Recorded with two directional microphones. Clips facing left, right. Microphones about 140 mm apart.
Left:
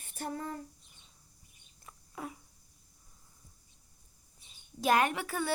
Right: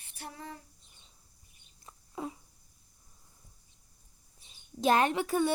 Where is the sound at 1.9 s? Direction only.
25° right (ahead or behind).